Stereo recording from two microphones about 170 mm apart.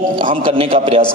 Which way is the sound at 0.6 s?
35° right (ahead or behind).